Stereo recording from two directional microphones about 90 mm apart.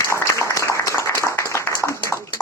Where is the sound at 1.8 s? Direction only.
35° left (ahead or behind).